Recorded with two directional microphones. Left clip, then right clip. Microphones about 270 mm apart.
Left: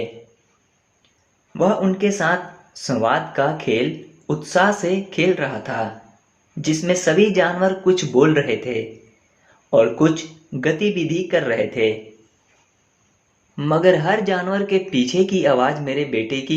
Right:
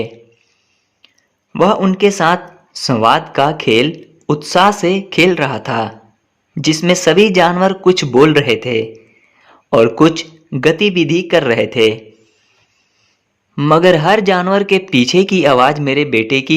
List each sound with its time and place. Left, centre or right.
1.5 s speech: right
13.6 s speech: right